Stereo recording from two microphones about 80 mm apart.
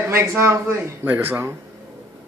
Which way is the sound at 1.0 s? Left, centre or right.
Right.